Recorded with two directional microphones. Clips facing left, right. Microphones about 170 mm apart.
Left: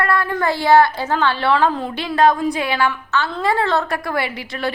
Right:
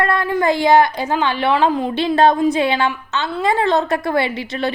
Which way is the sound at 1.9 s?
25° right (ahead or behind).